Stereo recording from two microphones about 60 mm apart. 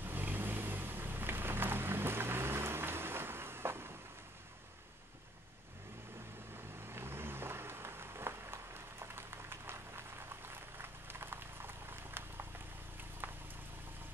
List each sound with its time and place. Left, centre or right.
0.0 s vehicle: right
6.5 s vehicle: right
13.2 s boiling: right